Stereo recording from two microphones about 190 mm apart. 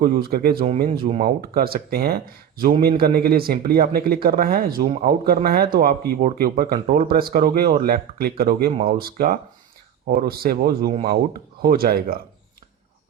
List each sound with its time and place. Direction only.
0.0 s speech: 50° right (ahead or behind)
0.9 s speech: 35° right (ahead or behind)
1.5 s speech: 55° right (ahead or behind)